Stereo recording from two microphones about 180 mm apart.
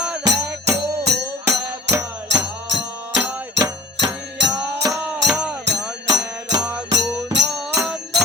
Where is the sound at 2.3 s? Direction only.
75° right (ahead or behind).